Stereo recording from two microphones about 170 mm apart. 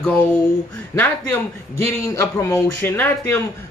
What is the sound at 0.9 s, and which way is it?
Speech, 10° left (ahead or behind).